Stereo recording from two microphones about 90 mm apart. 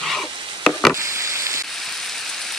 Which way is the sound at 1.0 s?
30° right (ahead or behind).